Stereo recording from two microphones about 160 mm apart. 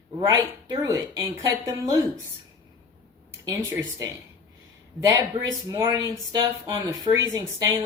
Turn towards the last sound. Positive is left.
turn(degrees=-25)  # may be behind; listen again after turning